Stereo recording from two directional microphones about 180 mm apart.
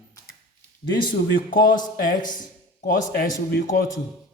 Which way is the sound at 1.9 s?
50° left (ahead or behind).